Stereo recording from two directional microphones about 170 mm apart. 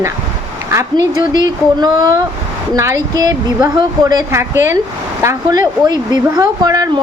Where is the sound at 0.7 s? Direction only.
20° right (ahead or behind).